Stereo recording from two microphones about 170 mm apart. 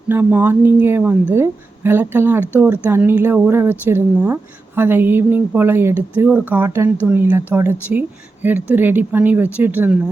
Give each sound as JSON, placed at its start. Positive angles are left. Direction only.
{"t": 0.1, "sound": "a woman's voice", "side_deg": -10}